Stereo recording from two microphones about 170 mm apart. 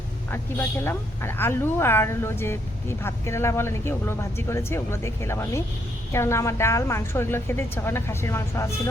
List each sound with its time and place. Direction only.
0.3 s speech: 15° left (ahead or behind)